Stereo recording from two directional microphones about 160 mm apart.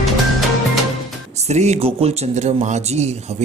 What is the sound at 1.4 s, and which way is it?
Speech, 45° right (ahead or behind).